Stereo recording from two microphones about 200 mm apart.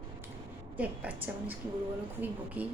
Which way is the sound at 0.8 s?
10° right (ahead or behind).